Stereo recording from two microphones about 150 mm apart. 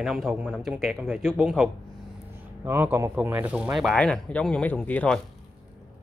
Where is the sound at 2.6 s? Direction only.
15° right (ahead or behind); by 5.2 s 10° left (ahead or behind).